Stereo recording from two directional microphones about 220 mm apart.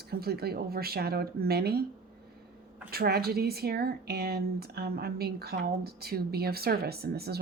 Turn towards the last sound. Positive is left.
turn(degrees=-45)  # may be behind; listen again after turning